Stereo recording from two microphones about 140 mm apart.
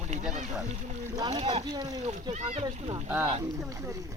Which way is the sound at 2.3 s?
55° right (ahead or behind).